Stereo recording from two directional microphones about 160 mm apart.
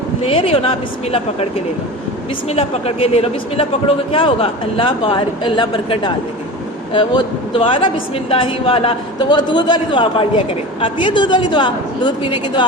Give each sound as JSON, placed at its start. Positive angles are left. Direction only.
{"t": 0.2, "sound": "a man's voice", "side_deg": 35}
{"t": 2.5, "sound": "a man's voice", "side_deg": 40}